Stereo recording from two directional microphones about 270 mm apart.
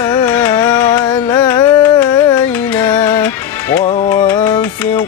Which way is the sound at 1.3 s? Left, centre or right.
Centre.